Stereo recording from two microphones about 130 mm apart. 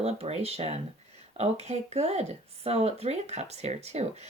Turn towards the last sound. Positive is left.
turn(degrees=-55)  # may be behind; listen again after turning